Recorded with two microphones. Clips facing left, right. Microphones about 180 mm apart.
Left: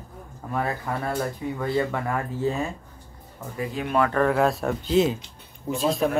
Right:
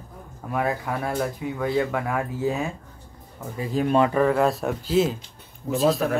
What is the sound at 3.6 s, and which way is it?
Speech, 30° right (ahead or behind).